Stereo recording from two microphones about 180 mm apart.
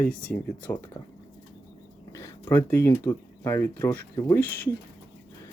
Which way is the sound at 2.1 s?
15° left (ahead or behind).